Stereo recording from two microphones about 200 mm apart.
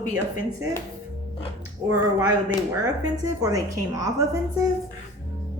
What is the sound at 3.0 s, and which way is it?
A woman's voice, 15° right (ahead or behind).